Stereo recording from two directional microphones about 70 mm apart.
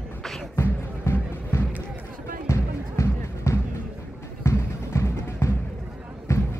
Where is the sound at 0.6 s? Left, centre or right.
Left.